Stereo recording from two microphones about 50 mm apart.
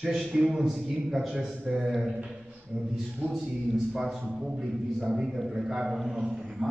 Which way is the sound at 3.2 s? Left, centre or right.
Right.